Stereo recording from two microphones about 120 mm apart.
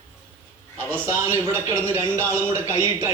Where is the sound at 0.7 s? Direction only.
15° left (ahead or behind).